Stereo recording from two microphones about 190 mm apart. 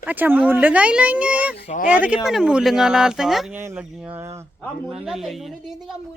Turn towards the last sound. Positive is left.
turn(degrees=0)  # may be behind; listen again after turning